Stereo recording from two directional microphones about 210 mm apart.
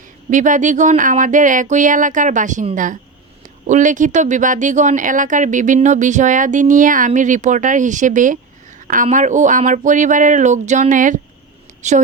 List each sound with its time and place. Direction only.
0.3 s a woman's voice: 35° right (ahead or behind)